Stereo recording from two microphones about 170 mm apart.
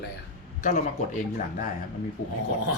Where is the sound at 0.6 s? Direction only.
50° left (ahead or behind).